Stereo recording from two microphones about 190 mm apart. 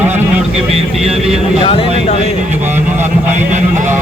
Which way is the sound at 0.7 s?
30° right (ahead or behind).